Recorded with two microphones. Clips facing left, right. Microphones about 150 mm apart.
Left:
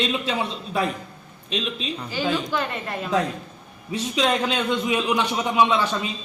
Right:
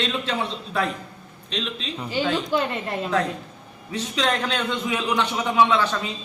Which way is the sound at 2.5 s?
25° right (ahead or behind).